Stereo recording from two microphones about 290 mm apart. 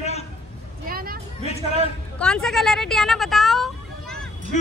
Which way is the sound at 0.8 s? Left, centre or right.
Right.